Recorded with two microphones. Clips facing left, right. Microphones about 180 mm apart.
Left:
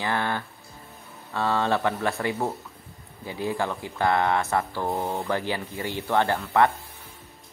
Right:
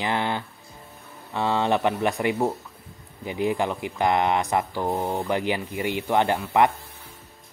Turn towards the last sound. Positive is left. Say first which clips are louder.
# right 1 dB
turn(degrees=-15)  # may be behind; listen again after turning